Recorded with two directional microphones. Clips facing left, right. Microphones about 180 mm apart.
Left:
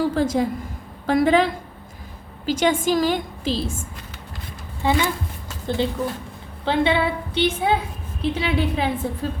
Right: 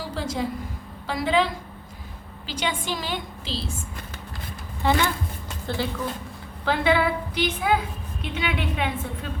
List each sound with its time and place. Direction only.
0.0 s a woman's voice: 50° left (ahead or behind)
2.5 s a woman's voice: 45° left (ahead or behind)
4.8 s a woman's voice: 15° left (ahead or behind); by 9.3 s 35° left (ahead or behind)